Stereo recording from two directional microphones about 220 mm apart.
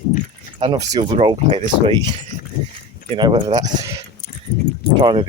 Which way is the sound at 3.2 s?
20° right (ahead or behind).